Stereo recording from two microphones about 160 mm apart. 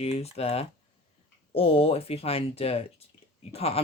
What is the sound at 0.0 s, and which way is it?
Speech, 40° left (ahead or behind).